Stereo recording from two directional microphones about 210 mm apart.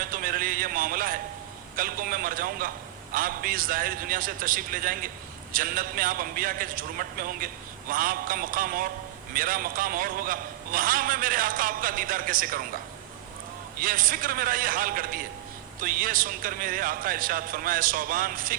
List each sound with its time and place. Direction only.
0.0 s a sound: 45° right (ahead or behind)
1.7 s a man's voice: 40° right (ahead or behind)
13.7 s a man's voice: 40° right (ahead or behind)